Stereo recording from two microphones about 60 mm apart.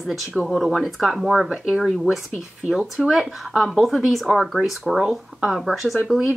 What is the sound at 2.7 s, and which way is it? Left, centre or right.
Speech, centre.